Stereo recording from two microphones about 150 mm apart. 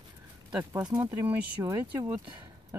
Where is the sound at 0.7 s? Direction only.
20° right (ahead or behind).